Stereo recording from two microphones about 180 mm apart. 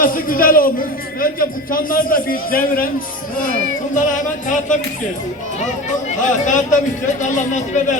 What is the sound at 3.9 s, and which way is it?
A man's voice, 45° left (ahead or behind).